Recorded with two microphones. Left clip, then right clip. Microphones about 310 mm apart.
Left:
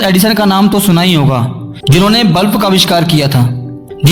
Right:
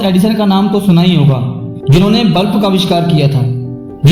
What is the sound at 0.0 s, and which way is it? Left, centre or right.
A man's voice, left.